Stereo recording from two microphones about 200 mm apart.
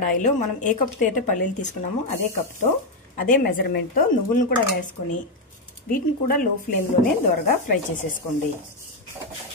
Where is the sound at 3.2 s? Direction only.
45° left (ahead or behind).